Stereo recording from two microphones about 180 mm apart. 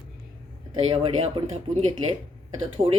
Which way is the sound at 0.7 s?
30° right (ahead or behind).